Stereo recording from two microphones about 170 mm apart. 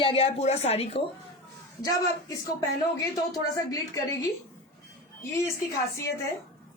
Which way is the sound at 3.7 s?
20° left (ahead or behind).